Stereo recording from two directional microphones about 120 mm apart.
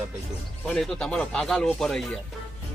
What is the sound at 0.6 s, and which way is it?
Speech, 5° left (ahead or behind).